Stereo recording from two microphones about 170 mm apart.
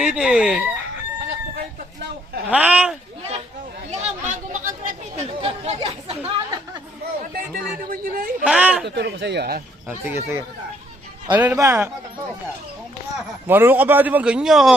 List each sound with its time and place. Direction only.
0.0 s chicken: 5° right (ahead or behind)
2.5 s a man's voice: 10° right (ahead or behind)
3.9 s speech: 45° right (ahead or behind)
7.3 s speech: 55° right (ahead or behind)
8.4 s a man's voice: 5° right (ahead or behind)
9.0 s speech: 80° right
10.1 s a man's voice: 15° right (ahead or behind)
13.5 s a man's voice: 10° right (ahead or behind)